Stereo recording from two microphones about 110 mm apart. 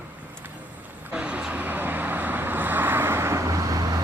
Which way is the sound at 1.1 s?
10° right (ahead or behind).